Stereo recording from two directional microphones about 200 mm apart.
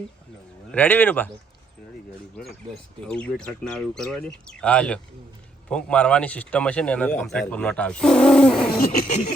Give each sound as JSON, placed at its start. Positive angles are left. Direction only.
{"t": 0.7, "sound": "speech", "side_deg": 10}
{"t": 3.1, "sound": "a man's voice", "side_deg": 5}
{"t": 8.8, "sound": "a sound", "side_deg": 35}